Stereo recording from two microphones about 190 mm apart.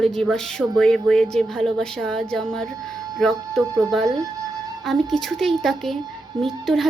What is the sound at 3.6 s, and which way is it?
Speech, 20° right (ahead or behind).